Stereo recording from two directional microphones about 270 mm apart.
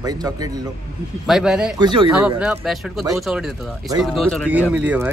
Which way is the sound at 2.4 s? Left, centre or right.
Centre.